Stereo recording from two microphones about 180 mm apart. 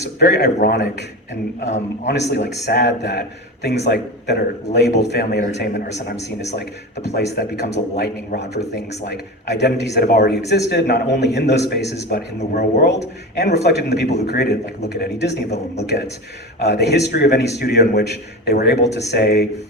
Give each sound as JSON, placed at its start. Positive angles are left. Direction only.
{"t": 0.2, "sound": "a man's voice", "side_deg": 60}
{"t": 15.4, "sound": "a man's voice", "side_deg": 40}
{"t": 16.6, "sound": "a man's voice", "side_deg": 65}